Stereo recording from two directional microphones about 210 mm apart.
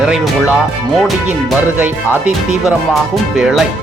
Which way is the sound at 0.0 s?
5° right (ahead or behind).